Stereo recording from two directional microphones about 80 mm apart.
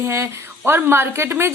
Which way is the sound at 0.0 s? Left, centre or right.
Right.